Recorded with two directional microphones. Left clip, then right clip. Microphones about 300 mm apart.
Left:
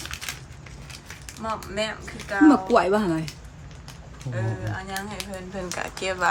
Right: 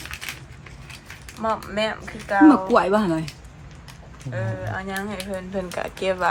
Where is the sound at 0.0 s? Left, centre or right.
Centre.